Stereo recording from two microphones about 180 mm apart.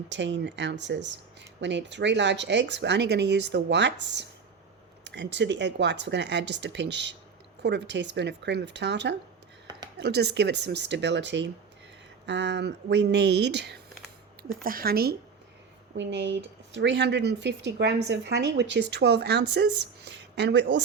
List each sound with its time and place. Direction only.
0.1 s speech: 80° right
14.4 s a woman's voice: 55° right (ahead or behind)
16.0 s speech: 80° right